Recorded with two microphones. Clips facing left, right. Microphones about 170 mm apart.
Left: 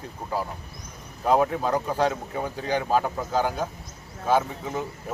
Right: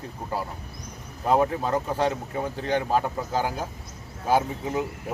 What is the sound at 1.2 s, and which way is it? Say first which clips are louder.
Speech: left 1 dB; centre (ahead or behind).